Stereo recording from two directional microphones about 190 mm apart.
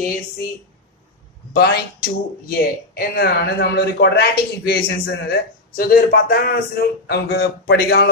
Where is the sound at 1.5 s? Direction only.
55° left (ahead or behind).